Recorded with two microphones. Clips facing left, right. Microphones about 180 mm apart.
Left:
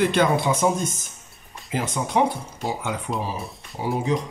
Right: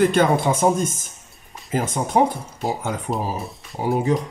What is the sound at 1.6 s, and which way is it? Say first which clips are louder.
Speech: right 3 dB; 45° right (ahead or behind).